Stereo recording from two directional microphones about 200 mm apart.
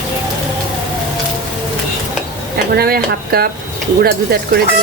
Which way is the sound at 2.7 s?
50° right (ahead or behind).